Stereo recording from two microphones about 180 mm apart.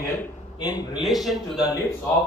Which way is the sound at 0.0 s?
20° left (ahead or behind).